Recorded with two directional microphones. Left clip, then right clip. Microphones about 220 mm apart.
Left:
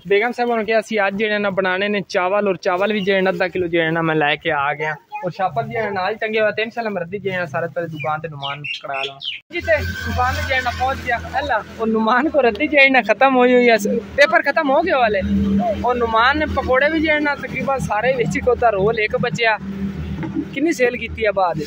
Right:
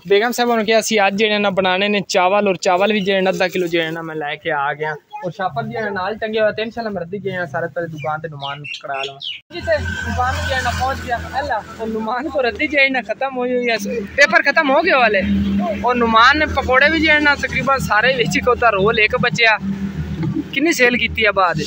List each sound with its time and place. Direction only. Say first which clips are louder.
0.1 s speech: right 2 dB; 5° right (ahead or behind)
4.0 s speech: left 7 dB; 50° left (ahead or behind)
4.5 s speech: even; centre (ahead or behind)
10.6 s speech: even; centre (ahead or behind)
12.4 s speech: even; 25° left (ahead or behind)
14.1 s speech: right 2 dB; 10° left (ahead or behind)